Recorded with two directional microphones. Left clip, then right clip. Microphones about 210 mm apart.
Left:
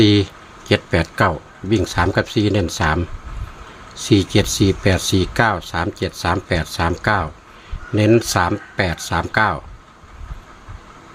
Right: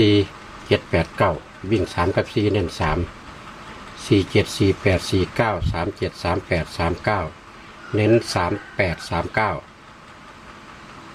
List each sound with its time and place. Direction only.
0.0 s speech: 35° left (ahead or behind)